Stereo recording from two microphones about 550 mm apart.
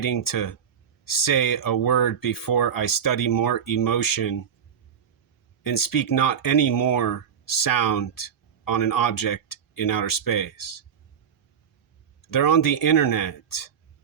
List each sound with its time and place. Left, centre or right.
0.0 s speech: left
5.6 s speech: left
12.3 s speech: left